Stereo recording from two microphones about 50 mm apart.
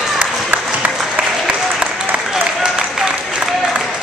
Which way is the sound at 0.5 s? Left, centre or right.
Right.